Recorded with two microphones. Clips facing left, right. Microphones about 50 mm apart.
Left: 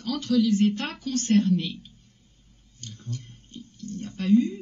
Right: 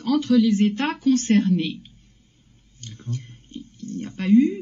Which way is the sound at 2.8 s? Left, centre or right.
Right.